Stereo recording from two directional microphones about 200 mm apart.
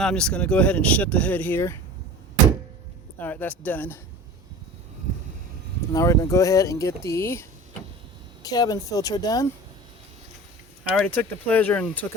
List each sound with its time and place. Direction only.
0.0 s speech: 5° left (ahead or behind)
3.2 s speech: 10° left (ahead or behind)
5.9 s speech: 15° left (ahead or behind)
10.9 s speech: 5° left (ahead or behind)